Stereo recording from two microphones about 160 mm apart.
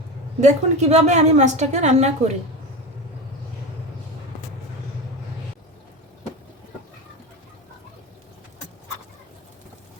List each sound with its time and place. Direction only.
0.3 s a woman's voice: 45° right (ahead or behind)